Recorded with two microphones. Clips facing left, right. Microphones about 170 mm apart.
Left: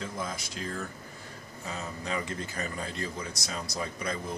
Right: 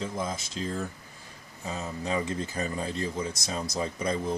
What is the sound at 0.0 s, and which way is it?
Speech, 20° right (ahead or behind).